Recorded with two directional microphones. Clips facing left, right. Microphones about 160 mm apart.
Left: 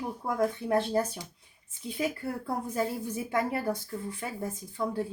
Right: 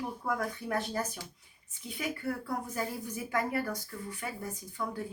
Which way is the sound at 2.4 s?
25° left (ahead or behind).